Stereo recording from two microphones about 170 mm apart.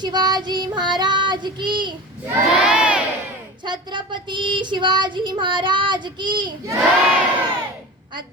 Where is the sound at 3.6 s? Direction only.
25° right (ahead or behind).